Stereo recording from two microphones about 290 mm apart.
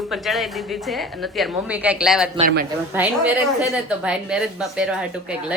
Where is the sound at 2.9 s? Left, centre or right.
Centre.